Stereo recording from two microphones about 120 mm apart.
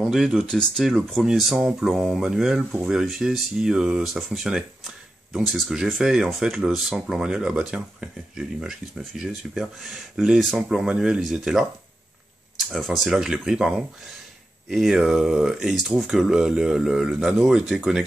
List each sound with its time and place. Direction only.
0.0 s speech: centre (ahead or behind)